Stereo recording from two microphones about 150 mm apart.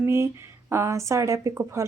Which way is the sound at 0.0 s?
20° right (ahead or behind).